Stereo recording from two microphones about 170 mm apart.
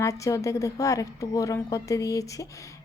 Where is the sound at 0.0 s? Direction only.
20° left (ahead or behind).